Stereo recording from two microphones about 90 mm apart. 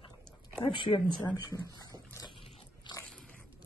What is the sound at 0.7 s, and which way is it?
Speech, 65° left (ahead or behind).